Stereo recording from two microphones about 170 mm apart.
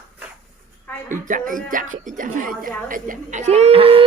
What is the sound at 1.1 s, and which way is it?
Speech, 50° right (ahead or behind).